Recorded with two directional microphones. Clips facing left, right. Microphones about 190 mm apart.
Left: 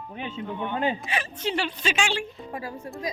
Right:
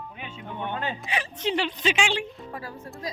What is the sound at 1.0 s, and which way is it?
A woman's voice, 15° right (ahead or behind).